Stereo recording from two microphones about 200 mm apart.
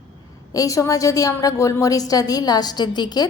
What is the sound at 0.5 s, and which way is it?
A woman's voice, 15° left (ahead or behind).